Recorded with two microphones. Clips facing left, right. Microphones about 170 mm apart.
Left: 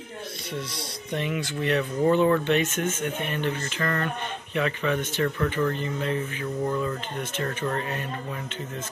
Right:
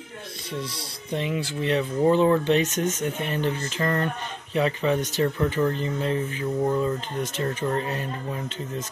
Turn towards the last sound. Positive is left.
turn(degrees=-25)  # may be behind; listen again after turning